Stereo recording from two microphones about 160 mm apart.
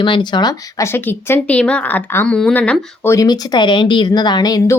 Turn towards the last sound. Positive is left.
turn(degrees=25)  # may be behind; listen again after turning